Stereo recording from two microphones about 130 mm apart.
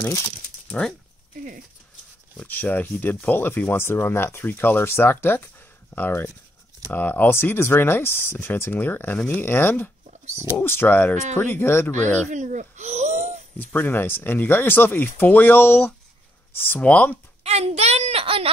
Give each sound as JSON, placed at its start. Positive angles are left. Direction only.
{"t": 0.0, "sound": "speech", "side_deg": 20}
{"t": 0.7, "sound": "speech", "side_deg": 5}
{"t": 2.3, "sound": "speech", "side_deg": 15}
{"t": 12.3, "sound": "speech", "side_deg": -70}
{"t": 13.6, "sound": "speech", "side_deg": 15}
{"t": 17.4, "sound": "a sound", "side_deg": -50}